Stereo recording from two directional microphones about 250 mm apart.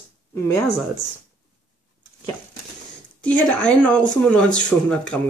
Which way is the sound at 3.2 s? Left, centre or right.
Centre.